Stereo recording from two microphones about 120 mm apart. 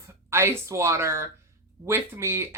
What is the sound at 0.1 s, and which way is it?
A woman's voice, 20° right (ahead or behind).